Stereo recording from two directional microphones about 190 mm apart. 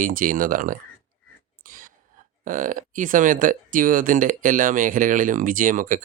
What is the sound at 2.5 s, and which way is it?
Speech, 45° right (ahead or behind).